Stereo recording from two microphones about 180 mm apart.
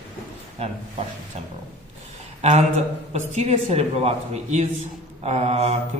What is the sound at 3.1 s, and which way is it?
Speech, 35° right (ahead or behind).